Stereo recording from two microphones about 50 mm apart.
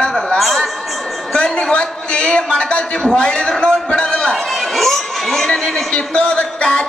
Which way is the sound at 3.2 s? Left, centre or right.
Centre.